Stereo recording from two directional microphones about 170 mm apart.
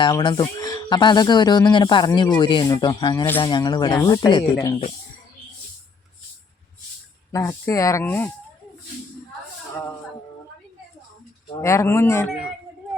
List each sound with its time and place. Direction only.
0.0 s speech: 25° left (ahead or behind)
7.3 s speech: 20° left (ahead or behind)
11.6 s speech: 15° left (ahead or behind)